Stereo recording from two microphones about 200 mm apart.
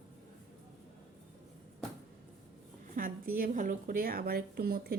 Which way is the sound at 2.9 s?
45° right (ahead or behind).